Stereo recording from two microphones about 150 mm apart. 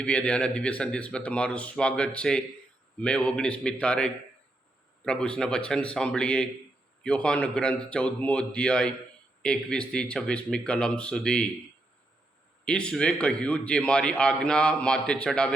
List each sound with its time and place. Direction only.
0.0 s a man's voice: 5° left (ahead or behind)
12.6 s a man's voice: 5° left (ahead or behind)